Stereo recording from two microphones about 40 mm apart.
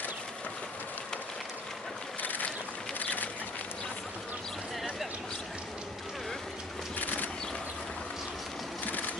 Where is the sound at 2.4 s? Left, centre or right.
Left.